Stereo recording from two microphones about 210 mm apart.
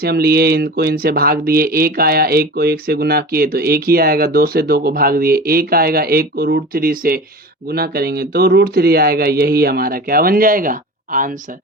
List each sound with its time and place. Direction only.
0.0 s speech: 50° right (ahead or behind)